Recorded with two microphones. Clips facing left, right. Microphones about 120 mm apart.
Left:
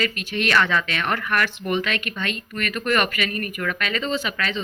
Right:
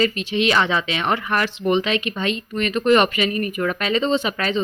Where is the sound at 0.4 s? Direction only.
20° right (ahead or behind).